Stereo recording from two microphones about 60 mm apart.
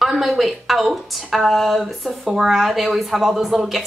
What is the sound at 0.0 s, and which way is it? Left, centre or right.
Speech, centre.